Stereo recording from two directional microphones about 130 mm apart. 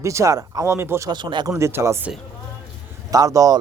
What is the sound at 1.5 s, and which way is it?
Speech, 20° right (ahead or behind).